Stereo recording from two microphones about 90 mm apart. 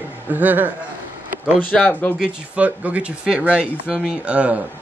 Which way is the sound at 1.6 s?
20° left (ahead or behind).